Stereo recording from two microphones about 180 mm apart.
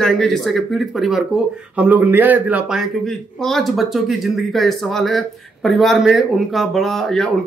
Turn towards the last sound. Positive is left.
turn(degrees=0)  # may be behind; listen again after turning